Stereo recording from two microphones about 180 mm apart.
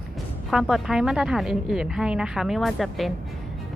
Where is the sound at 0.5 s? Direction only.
5° right (ahead or behind).